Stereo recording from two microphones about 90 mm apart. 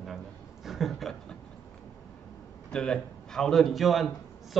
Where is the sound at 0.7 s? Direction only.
Centre (ahead or behind).